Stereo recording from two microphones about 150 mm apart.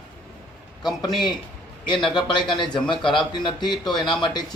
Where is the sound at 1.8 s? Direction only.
30° left (ahead or behind).